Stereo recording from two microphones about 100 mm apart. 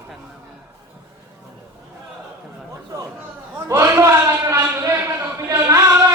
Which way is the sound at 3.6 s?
25° right (ahead or behind).